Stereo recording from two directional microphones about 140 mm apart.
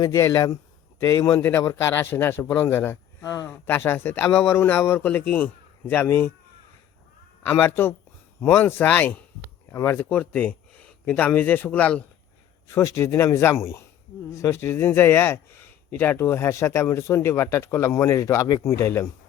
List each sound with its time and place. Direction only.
0.0 s a man's voice: 25° left (ahead or behind)
1.4 s a man's voice: 15° left (ahead or behind)
7.4 s a man's voice: 15° left (ahead or behind)
12.7 s a man's voice: 20° left (ahead or behind)